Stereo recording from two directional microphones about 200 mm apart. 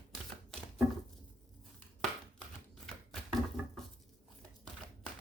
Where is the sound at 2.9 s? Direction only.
5° left (ahead or behind).